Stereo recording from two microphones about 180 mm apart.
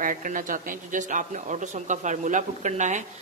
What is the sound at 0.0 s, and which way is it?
A woman's voice, 50° right (ahead or behind).